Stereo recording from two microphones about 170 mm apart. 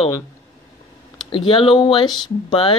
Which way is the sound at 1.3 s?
30° left (ahead or behind).